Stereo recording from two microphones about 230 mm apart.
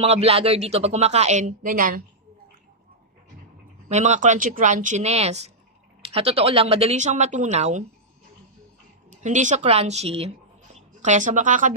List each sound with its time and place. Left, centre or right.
0.0 s a woman's voice: right
3.9 s a woman's voice: right
9.2 s speech: right